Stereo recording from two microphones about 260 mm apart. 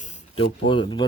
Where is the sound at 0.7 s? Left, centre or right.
Centre.